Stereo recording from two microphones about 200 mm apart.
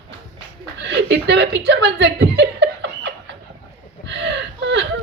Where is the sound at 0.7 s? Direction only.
60° right (ahead or behind).